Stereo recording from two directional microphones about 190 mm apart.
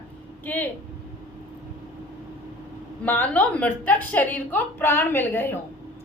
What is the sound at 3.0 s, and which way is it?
A woman's voice, 10° left (ahead or behind).